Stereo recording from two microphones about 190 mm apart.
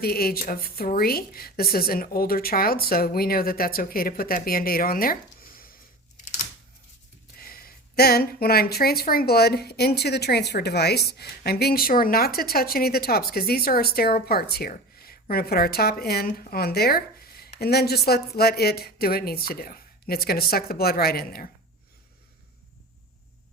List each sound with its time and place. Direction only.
0.0 s speech: 55° left (ahead or behind)
7.3 s speech: 50° left (ahead or behind)